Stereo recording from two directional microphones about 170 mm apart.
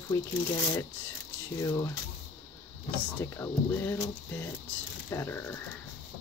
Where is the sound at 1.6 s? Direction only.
20° left (ahead or behind).